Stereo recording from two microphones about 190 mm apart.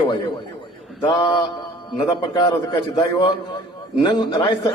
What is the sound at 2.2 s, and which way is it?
Speech, 25° left (ahead or behind).